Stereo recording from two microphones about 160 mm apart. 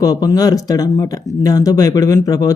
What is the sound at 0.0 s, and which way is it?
Speech, 20° left (ahead or behind).